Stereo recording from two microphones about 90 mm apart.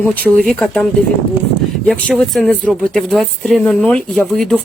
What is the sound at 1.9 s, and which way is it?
Speech, 5° left (ahead or behind).